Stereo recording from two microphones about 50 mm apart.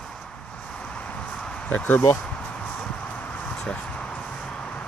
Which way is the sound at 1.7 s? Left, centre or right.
Left.